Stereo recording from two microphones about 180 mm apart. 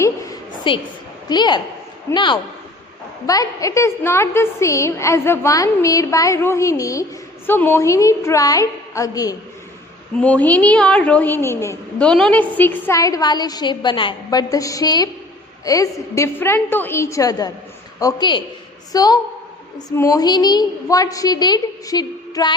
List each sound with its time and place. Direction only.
0.0 s a sound: 25° left (ahead or behind)
1.3 s a woman's voice: 25° left (ahead or behind)
10.2 s a woman's voice: 5° left (ahead or behind)